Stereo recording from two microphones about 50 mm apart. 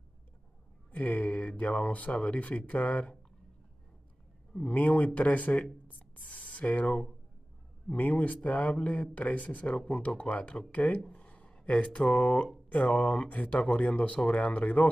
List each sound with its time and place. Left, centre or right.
0.9 s speech: left
4.6 s speech: left
5.9 s a sound: left
7.9 s speech: left